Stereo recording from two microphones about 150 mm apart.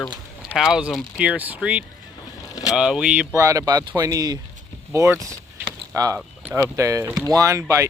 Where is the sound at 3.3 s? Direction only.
20° right (ahead or behind).